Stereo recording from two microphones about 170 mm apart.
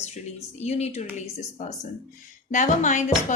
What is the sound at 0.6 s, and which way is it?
A woman's voice, 40° left (ahead or behind).